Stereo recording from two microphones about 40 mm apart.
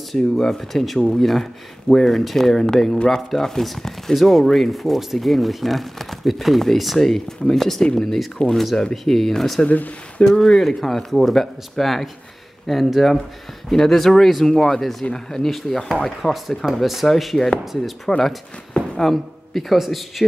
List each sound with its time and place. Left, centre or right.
0.1 s speech: centre
9.7 s speech: left
10.2 s speech: centre
16.2 s speech: centre
18.1 s a man's voice: centre